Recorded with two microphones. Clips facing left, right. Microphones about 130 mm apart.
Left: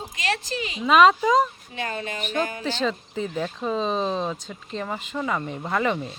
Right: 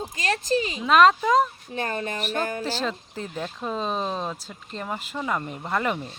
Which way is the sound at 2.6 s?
5° right (ahead or behind).